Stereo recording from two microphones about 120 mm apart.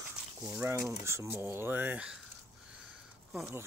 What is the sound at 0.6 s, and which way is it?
Speech, 20° right (ahead or behind).